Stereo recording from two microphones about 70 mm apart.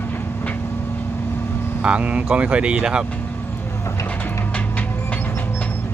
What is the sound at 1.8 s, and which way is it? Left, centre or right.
Speech, centre.